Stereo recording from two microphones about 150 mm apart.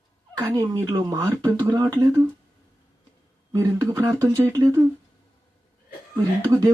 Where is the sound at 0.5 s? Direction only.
25° right (ahead or behind).